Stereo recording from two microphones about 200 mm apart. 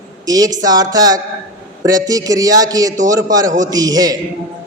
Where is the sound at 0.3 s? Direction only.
15° right (ahead or behind).